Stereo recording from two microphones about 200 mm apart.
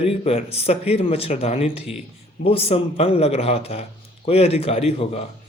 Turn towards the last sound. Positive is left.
turn(degrees=30)  # may be behind; listen again after turning